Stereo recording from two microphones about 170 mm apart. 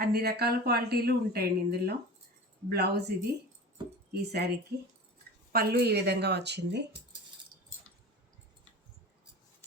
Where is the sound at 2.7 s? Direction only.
75° right (ahead or behind).